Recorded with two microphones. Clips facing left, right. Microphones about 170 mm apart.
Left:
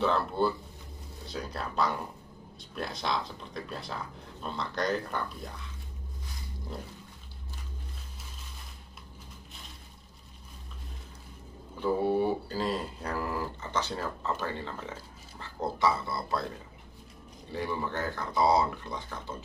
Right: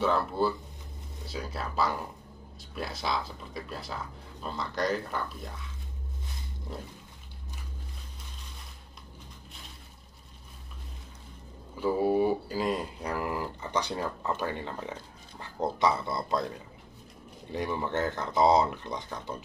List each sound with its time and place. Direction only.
0.0 s speech: centre (ahead or behind)
11.8 s speech: 10° right (ahead or behind)
17.5 s speech: 20° right (ahead or behind)